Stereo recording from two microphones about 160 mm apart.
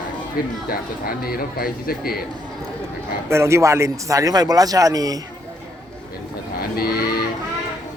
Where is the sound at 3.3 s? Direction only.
15° right (ahead or behind).